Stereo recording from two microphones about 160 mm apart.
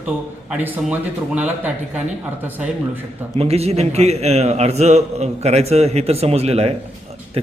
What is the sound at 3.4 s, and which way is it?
A man's voice, 40° right (ahead or behind).